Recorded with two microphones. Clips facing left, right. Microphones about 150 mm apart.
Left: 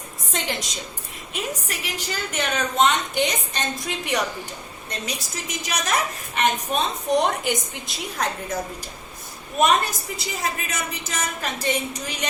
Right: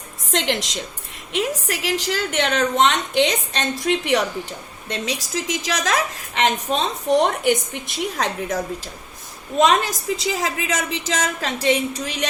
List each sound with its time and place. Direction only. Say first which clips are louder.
0.3 s a woman's voice: right 6 dB; 75° right (ahead or behind)
1.3 s a woman's voice: right 7 dB; 90° right; by 4.2 s 70° right (ahead or behind)
4.9 s a woman's voice: right 6 dB; 90° right
7.4 s a woman's voice: right 6 dB; 65° right (ahead or behind)
9.6 s a woman's voice: right 3 dB; 90° right